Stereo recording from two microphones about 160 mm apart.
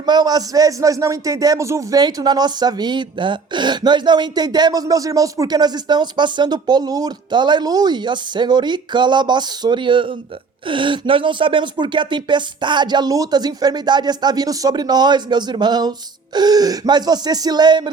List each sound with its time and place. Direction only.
0.0 s a man's voice: 25° right (ahead or behind)